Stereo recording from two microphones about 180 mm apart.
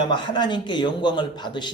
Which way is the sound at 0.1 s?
25° left (ahead or behind).